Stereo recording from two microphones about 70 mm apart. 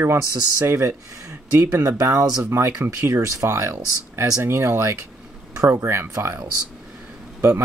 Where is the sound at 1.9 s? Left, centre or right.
Right.